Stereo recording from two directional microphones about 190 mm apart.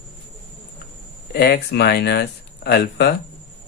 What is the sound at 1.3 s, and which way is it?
Speech, 55° left (ahead or behind).